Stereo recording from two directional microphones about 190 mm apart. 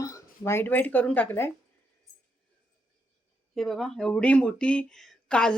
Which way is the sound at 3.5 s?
Centre (ahead or behind).